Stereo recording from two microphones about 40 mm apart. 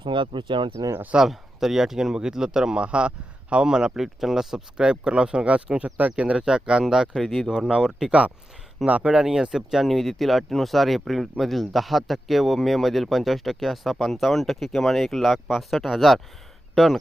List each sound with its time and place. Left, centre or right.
1.2 s speech: centre
4.0 s speech: centre
4.8 s speech: right
7.2 s speech: centre
8.9 s speech: right
9.1 s speech: centre
9.8 s speech: centre